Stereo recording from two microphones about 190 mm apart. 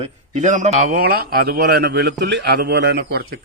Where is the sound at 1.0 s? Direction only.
50° right (ahead or behind).